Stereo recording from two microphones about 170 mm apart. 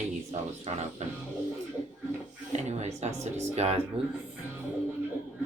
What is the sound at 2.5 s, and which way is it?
Speech, 40° right (ahead or behind).